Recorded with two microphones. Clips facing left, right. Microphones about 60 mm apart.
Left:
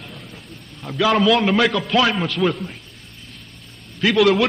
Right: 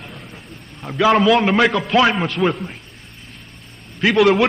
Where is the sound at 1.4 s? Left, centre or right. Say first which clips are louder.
Right 2 dB; right.